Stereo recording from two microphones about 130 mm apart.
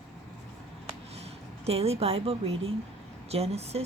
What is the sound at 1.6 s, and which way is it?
Speech, 50° right (ahead or behind).